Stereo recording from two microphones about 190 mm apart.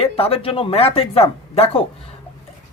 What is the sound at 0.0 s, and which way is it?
Speech, 30° left (ahead or behind).